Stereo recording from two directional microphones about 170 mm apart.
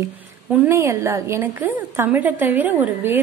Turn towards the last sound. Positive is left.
turn(degrees=-10)  # may be behind; listen again after turning